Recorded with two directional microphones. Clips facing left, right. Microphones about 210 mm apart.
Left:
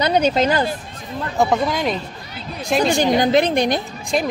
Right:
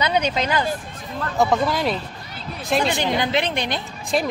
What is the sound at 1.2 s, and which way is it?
Speech, 15° left (ahead or behind).